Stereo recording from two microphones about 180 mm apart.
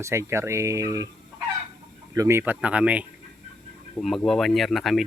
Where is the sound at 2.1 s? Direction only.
15° right (ahead or behind).